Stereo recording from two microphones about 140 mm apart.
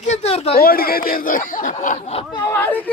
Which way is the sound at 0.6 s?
90° left.